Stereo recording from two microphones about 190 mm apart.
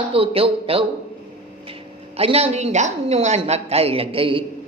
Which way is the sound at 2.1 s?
30° right (ahead or behind).